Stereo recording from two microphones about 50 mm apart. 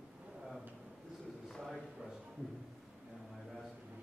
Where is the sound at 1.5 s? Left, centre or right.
Centre.